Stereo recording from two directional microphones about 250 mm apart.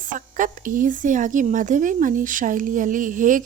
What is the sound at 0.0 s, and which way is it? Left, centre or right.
A woman's voice, right.